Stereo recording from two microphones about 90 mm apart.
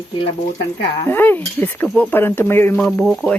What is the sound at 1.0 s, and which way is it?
Speech, 20° left (ahead or behind).